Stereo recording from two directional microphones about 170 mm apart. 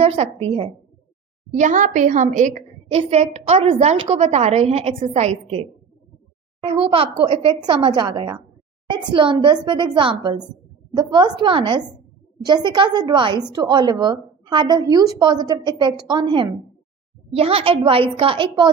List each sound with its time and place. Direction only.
0.0 s a woman's voice: 35° right (ahead or behind)
1.5 s a woman's voice: 45° right (ahead or behind); by 18.7 s 30° right (ahead or behind)